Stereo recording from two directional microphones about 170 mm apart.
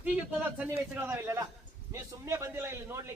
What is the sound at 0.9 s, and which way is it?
A man's voice, 10° right (ahead or behind).